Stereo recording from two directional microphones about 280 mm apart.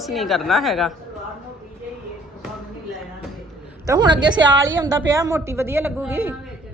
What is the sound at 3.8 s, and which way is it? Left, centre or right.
A woman's voice, centre.